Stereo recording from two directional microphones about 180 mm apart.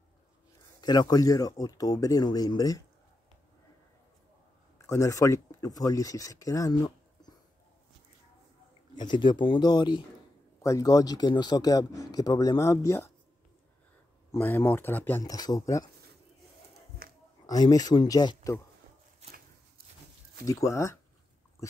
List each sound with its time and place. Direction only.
0.7 s speech: 25° left (ahead or behind)
4.7 s speech: 15° left (ahead or behind)
8.9 s speech: 25° left (ahead or behind)
14.3 s speech: 10° left (ahead or behind)
17.0 s a sound: 55° right (ahead or behind)
17.5 s speech: 20° left (ahead or behind)
19.2 s a sound: 35° right (ahead or behind)
20.4 s speech: 15° left (ahead or behind)